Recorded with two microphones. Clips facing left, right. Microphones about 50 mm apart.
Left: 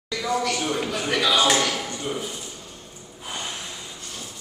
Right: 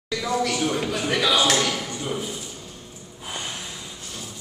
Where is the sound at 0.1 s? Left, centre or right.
Centre.